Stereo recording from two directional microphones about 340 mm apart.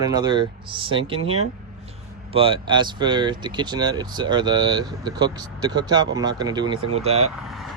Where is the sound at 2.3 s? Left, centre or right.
Centre.